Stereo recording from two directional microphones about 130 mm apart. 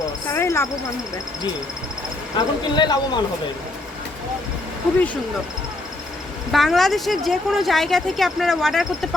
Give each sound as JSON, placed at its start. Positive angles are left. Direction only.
{"t": 0.3, "sound": "speech", "side_deg": 20}
{"t": 2.3, "sound": "speech", "side_deg": 35}
{"t": 6.5, "sound": "a woman's voice", "side_deg": 0}